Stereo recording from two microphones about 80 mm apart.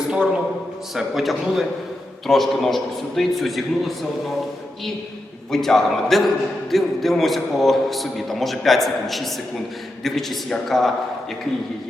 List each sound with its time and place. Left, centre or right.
0.9 s a man's voice: centre
5.5 s a man's voice: centre